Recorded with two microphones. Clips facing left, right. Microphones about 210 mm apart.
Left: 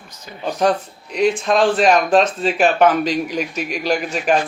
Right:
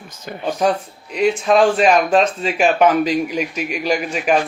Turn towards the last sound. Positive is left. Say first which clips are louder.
# even
turn(degrees=-5)  # may be behind; listen again after turning